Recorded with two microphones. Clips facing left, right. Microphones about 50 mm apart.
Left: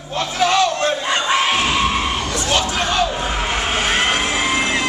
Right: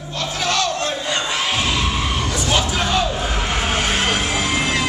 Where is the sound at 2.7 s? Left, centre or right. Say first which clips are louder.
Left 1 dB; centre.